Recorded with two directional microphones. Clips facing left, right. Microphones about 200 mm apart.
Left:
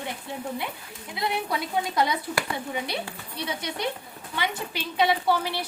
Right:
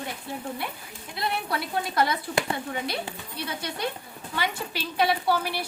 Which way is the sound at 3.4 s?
20° left (ahead or behind).